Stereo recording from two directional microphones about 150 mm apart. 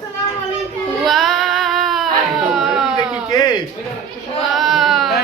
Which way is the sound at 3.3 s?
25° left (ahead or behind).